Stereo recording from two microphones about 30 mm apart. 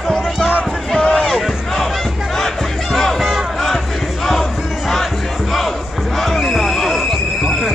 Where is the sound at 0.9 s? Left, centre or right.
Centre.